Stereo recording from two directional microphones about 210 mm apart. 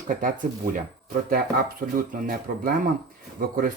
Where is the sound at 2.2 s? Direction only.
45° right (ahead or behind).